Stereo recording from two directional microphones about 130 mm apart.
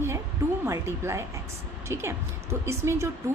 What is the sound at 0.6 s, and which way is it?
A woman's voice, 20° right (ahead or behind).